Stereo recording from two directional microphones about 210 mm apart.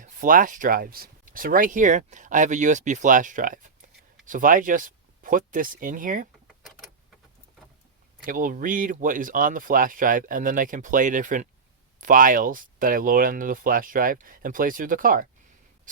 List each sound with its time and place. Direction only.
0.0 s speech: 40° right (ahead or behind)
8.2 s speech: 40° right (ahead or behind)